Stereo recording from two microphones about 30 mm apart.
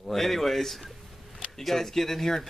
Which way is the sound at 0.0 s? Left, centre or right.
Centre.